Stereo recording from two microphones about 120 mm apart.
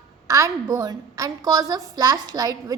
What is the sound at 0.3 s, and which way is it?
A woman's voice, 25° right (ahead or behind).